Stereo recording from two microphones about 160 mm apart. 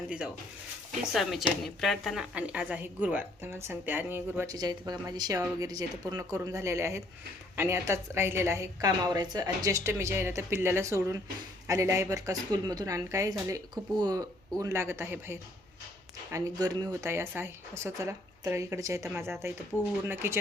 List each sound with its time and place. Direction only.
1.1 s a woman's voice: centre (ahead or behind)
4.5 s a woman's voice: 25° right (ahead or behind)